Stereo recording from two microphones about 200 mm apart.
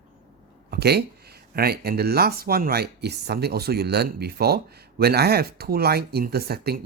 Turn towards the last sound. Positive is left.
turn(degrees=-50)  # may be behind; listen again after turning